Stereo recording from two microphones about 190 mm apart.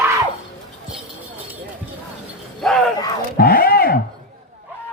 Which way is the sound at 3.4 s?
50° left (ahead or behind).